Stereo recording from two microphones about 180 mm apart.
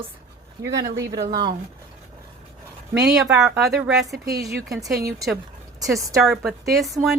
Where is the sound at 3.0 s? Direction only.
5° right (ahead or behind).